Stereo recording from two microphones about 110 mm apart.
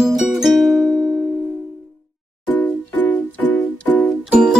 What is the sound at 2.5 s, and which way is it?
Music, 15° left (ahead or behind).